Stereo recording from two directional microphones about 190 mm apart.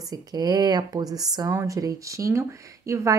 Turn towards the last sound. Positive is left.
turn(degrees=-15)  # may be behind; listen again after turning